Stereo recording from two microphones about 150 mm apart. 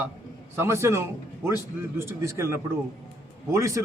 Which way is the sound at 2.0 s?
15° right (ahead or behind).